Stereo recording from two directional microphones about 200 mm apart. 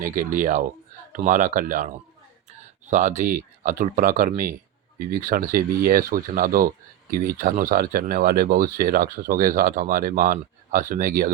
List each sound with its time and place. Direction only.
0.0 s speech: 40° right (ahead or behind)